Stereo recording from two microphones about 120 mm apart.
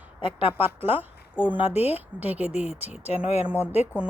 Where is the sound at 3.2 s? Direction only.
60° left (ahead or behind).